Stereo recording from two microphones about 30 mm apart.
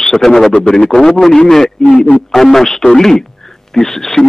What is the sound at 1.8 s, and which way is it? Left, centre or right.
A man's voice, left.